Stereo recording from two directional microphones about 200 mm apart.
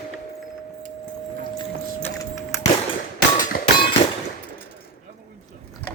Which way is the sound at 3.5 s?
45° left (ahead or behind).